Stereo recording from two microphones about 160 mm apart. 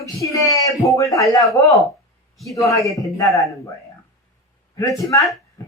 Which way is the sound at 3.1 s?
20° left (ahead or behind).